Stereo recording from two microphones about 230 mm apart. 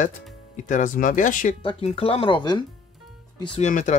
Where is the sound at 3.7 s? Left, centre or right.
Left.